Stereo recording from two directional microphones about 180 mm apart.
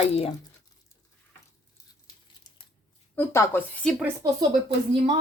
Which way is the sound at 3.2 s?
15° left (ahead or behind).